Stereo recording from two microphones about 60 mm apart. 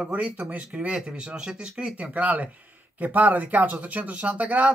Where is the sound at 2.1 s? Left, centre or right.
Right.